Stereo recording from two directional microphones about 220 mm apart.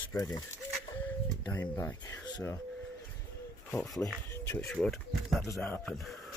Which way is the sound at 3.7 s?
5° left (ahead or behind).